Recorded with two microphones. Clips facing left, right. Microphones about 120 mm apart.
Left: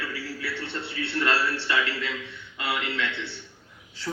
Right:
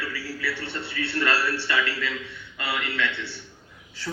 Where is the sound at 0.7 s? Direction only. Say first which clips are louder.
Right 1 dB; 20° left (ahead or behind).